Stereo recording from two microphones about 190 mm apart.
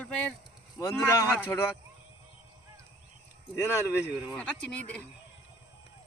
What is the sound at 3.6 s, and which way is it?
Speech, 15° left (ahead or behind).